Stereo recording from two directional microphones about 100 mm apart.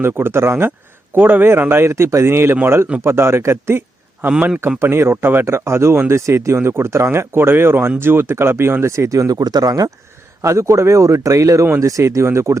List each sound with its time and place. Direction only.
0.0 s speech: 25° right (ahead or behind); by 9.9 s 40° right (ahead or behind)
10.4 s speech: 30° right (ahead or behind)